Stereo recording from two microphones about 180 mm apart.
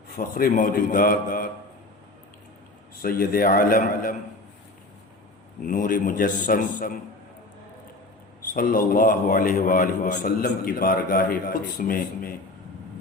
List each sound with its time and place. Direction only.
0.2 s a man's voice: 55° left (ahead or behind)
3.0 s a man's voice: 55° left (ahead or behind)
5.6 s a man's voice: 50° left (ahead or behind)
8.5 s a man's voice: 50° left (ahead or behind)